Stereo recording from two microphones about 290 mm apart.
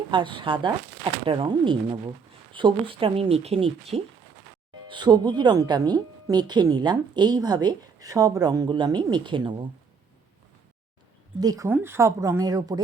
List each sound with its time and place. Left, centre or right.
0.1 s a woman's voice: centre
11.3 s a woman's voice: centre